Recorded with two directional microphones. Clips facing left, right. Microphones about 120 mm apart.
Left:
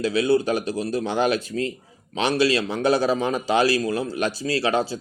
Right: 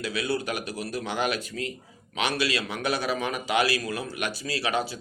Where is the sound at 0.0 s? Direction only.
30° left (ahead or behind).